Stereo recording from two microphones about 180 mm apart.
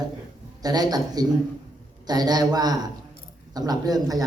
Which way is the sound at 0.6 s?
20° right (ahead or behind).